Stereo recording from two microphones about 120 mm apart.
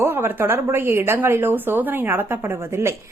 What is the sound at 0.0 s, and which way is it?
A woman's voice, 15° right (ahead or behind).